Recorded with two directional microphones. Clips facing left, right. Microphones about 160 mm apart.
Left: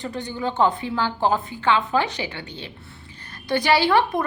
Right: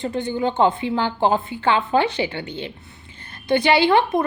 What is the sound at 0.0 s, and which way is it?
A woman's voice, 25° right (ahead or behind).